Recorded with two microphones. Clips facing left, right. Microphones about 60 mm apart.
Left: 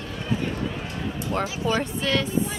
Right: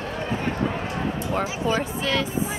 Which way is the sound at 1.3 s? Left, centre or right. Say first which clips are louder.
Even; centre.